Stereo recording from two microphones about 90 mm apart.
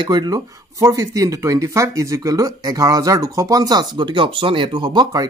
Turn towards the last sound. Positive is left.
turn(degrees=-50)  # may be behind; listen again after turning